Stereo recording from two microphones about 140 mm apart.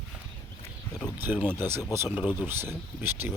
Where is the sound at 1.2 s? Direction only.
15° right (ahead or behind).